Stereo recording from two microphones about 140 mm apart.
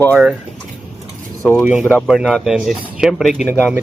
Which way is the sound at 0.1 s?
10° right (ahead or behind).